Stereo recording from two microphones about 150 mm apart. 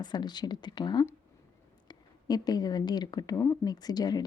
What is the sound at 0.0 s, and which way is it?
A woman's voice, 30° left (ahead or behind).